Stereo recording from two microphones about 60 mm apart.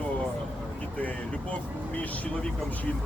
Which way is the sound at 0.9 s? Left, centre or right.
Left.